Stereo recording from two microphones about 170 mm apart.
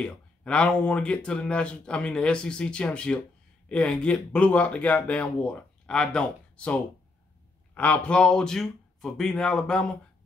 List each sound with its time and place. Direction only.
0.0 s speech: 5° left (ahead or behind)